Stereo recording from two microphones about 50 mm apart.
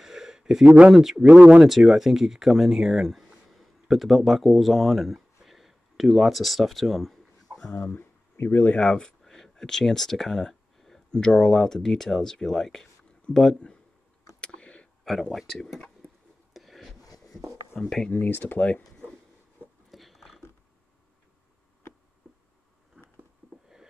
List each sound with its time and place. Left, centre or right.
0.0 s a sound: centre
0.7 s speech: right
1.6 s speech: centre
7.9 s speech: left
8.7 s speech: centre
11.1 s speech: centre
14.4 s a sound: left
15.3 s speech: centre
16.5 s a sound: centre
17.8 s speech: centre
18.1 s speech: left
19.9 s a sound: centre